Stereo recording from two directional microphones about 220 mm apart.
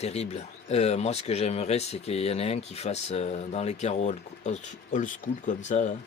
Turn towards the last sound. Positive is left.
turn(degrees=35)  # may be behind; listen again after turning